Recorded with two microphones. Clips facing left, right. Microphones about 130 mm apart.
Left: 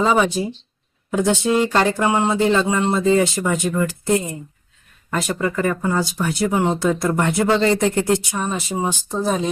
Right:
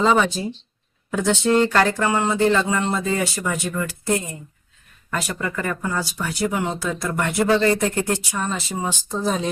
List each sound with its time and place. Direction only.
0.0 s speech: 5° left (ahead or behind)
9.0 s speech: 5° left (ahead or behind)